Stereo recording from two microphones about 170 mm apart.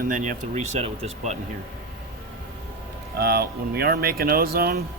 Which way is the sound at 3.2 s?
65° right (ahead or behind).